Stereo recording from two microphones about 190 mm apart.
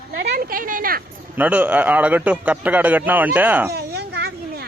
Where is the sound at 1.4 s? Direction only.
10° right (ahead or behind).